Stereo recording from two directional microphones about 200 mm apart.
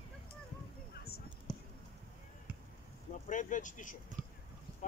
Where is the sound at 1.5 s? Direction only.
Centre (ahead or behind).